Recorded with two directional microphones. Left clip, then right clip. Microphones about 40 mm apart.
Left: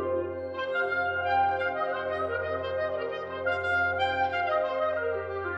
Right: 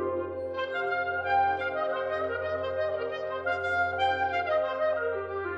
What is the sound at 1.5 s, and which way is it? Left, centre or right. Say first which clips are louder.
Trumpet: left 1 dB; left.